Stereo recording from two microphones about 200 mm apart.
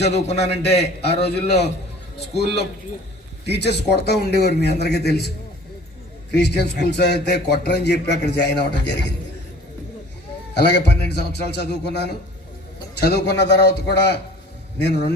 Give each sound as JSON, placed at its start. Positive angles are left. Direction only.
{"t": 0.6, "sound": "speech", "side_deg": 55}
{"t": 6.3, "sound": "speech", "side_deg": 55}
{"t": 10.5, "sound": "speech", "side_deg": 60}